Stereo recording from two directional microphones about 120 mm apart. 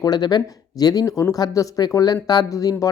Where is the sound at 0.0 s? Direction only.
35° left (ahead or behind).